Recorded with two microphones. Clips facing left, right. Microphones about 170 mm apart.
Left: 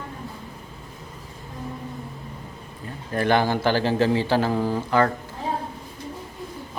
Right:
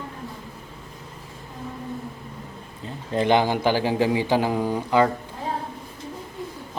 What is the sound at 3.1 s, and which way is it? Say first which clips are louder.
A man's voice: right 1 dB; 20° right (ahead or behind).